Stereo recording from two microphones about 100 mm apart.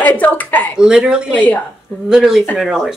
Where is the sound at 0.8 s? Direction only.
10° right (ahead or behind).